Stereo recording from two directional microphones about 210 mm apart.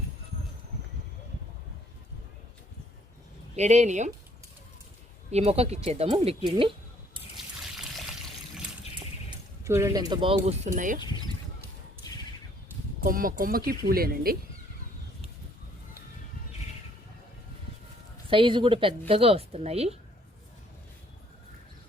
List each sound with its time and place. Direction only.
3.5 s speech: 35° right (ahead or behind)
5.3 s speech: 30° right (ahead or behind)
7.3 s trickle: centre (ahead or behind)
9.6 s speech: 15° right (ahead or behind); by 11.0 s 35° right (ahead or behind)
13.0 s speech: 40° right (ahead or behind)
18.3 s speech: 25° right (ahead or behind)